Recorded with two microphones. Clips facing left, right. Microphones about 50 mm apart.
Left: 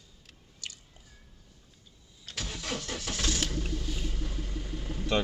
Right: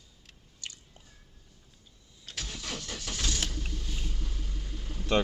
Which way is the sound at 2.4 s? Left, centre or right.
Centre.